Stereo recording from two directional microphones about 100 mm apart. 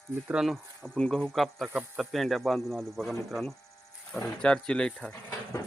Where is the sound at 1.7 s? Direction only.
10° right (ahead or behind).